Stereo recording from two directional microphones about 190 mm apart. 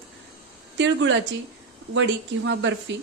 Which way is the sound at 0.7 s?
70° right (ahead or behind).